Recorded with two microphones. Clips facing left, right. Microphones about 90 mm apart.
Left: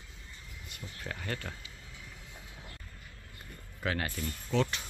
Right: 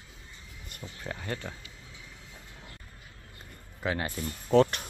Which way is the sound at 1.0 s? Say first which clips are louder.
Right 2 dB; 15° right (ahead or behind).